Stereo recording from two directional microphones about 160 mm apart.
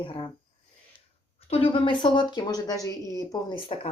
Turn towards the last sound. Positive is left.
turn(degrees=30)  # may be behind; listen again after turning